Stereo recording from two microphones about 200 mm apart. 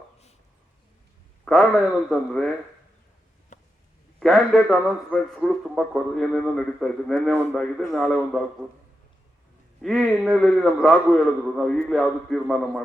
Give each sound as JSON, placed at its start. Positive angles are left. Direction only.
{"t": 1.5, "sound": "a man's voice", "side_deg": 0}
{"t": 3.5, "sound": "a sound", "side_deg": 40}
{"t": 4.2, "sound": "a man's voice", "side_deg": 0}
{"t": 9.8, "sound": "a man's voice", "side_deg": 0}